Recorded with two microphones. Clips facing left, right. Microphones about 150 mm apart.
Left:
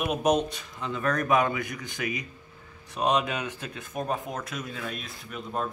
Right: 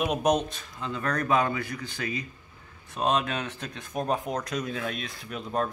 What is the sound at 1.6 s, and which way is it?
A man's voice, 20° left (ahead or behind).